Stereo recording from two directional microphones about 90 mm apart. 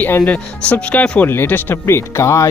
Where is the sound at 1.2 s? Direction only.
25° left (ahead or behind).